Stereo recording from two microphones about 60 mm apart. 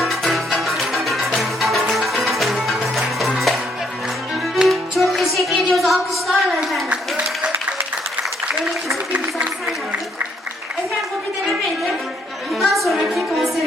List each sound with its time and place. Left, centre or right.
0.0 s music: centre
5.7 s a sound: centre
6.9 s applause: centre
12.5 s music: centre